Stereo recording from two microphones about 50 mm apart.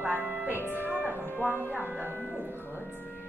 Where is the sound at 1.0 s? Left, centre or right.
Left.